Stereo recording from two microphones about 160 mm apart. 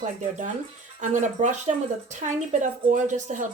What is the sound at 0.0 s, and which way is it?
Speech, 50° right (ahead or behind).